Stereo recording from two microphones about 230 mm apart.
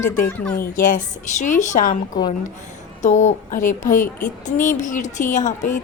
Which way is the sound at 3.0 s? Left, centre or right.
Left.